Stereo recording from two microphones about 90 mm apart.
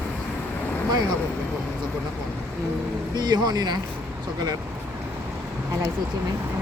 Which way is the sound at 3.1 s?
50° right (ahead or behind).